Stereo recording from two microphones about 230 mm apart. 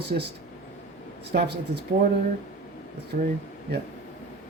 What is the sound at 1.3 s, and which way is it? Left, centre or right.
Speech, right.